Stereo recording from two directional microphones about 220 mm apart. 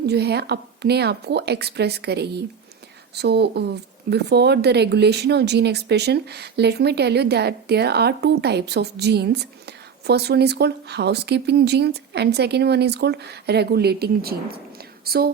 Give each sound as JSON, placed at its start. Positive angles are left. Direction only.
{"t": 0.0, "sound": "speech", "side_deg": -50}